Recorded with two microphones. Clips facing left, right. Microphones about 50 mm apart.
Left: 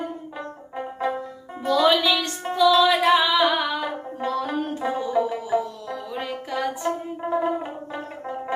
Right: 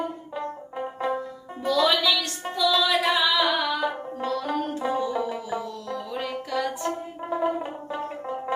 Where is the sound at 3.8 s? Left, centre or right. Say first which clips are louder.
Even; centre.